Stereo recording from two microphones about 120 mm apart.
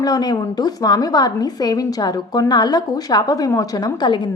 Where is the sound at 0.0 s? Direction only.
35° left (ahead or behind).